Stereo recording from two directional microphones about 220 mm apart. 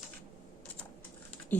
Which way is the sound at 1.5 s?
10° left (ahead or behind).